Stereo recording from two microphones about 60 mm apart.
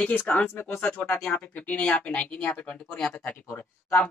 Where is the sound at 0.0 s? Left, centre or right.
Left.